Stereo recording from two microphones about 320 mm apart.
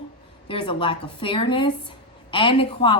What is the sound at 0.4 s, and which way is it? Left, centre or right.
A woman's voice, centre.